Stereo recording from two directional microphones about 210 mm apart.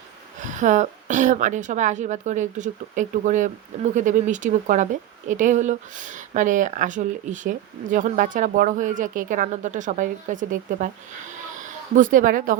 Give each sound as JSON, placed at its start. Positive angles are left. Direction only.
{"t": 0.3, "sound": "speech", "side_deg": -35}